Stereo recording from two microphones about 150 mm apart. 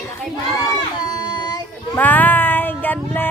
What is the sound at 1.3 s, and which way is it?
Child singing, 30° left (ahead or behind).